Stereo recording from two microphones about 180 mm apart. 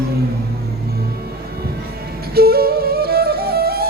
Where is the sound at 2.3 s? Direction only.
60° right (ahead or behind).